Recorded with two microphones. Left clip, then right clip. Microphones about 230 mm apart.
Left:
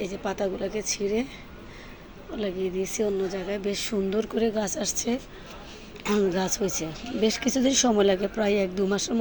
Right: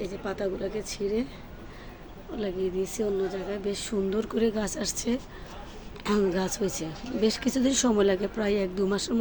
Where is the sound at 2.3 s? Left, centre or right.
Centre.